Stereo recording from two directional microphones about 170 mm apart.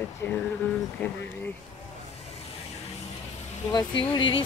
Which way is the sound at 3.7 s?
25° left (ahead or behind).